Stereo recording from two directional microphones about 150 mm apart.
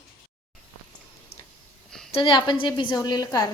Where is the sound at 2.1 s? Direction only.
35° left (ahead or behind).